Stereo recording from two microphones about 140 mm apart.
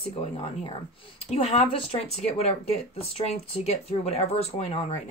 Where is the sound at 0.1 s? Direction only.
40° left (ahead or behind).